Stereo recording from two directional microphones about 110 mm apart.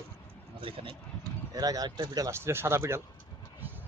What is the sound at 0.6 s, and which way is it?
Speech, 55° right (ahead or behind).